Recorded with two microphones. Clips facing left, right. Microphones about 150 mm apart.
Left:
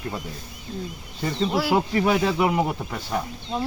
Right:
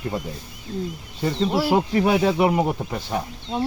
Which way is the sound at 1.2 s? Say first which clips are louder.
Right 2 dB; 10° right (ahead or behind).